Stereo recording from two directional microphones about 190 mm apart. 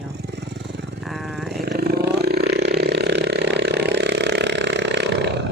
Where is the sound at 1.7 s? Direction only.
55° right (ahead or behind).